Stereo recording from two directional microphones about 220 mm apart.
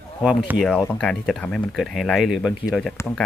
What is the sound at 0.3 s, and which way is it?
Speech, centre (ahead or behind).